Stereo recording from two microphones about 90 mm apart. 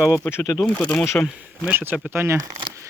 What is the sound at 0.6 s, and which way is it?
Speech, 10° left (ahead or behind).